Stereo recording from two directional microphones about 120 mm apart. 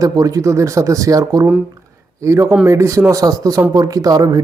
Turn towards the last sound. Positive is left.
turn(degrees=-30)  # may be behind; listen again after turning